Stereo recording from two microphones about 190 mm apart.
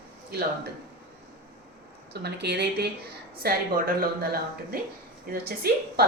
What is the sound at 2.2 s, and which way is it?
A woman's voice, 60° right (ahead or behind).